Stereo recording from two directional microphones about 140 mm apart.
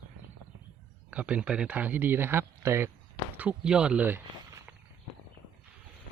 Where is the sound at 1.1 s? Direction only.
10° right (ahead or behind).